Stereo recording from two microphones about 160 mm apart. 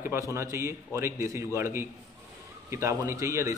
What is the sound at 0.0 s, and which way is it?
A man's voice, 15° right (ahead or behind).